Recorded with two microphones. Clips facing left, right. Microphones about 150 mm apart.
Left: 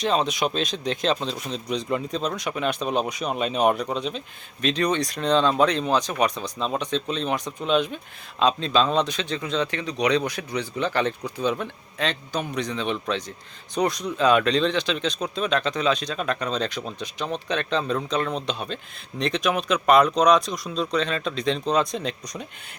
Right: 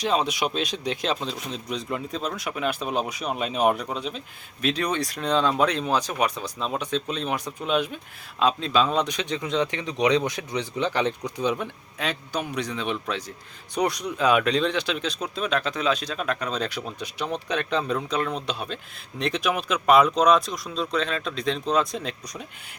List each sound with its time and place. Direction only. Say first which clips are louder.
0.0 s speech: left 1 dB; 10° right (ahead or behind)